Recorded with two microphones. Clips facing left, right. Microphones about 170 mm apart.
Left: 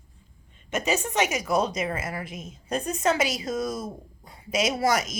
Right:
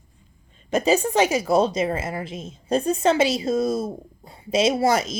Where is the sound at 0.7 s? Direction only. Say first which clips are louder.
Right 7 dB; 35° right (ahead or behind).